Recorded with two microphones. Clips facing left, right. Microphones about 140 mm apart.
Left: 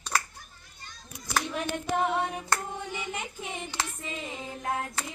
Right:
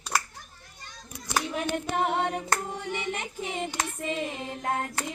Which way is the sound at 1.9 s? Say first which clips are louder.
Even; 55° right (ahead or behind).